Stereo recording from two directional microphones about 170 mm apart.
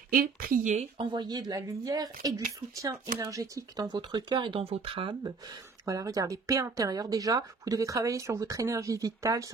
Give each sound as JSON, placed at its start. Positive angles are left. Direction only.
{"t": 0.1, "sound": "a woman's voice", "side_deg": -55}
{"t": 0.7, "sound": "speech", "side_deg": -30}